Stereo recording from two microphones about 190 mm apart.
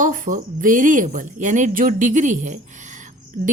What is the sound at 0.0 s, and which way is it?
A woman's voice, 45° right (ahead or behind).